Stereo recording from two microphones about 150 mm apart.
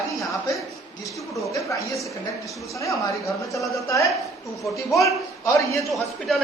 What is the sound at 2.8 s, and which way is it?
A man's voice, 20° left (ahead or behind).